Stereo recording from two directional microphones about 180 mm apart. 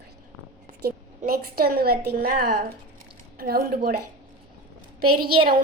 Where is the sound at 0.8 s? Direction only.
55° right (ahead or behind).